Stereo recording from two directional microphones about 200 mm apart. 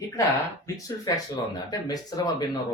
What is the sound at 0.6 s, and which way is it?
Speech, 15° left (ahead or behind).